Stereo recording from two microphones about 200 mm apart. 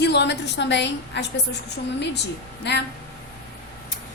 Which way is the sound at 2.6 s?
60° left (ahead or behind).